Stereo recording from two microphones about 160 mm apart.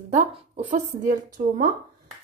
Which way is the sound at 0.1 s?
50° right (ahead or behind).